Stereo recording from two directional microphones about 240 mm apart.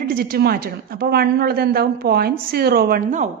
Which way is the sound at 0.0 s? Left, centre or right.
Right.